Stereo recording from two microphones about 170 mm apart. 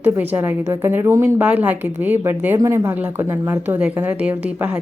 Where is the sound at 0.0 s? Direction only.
10° right (ahead or behind).